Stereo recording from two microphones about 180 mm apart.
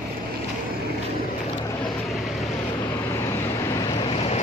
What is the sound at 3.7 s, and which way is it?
Vehicle, 20° left (ahead or behind).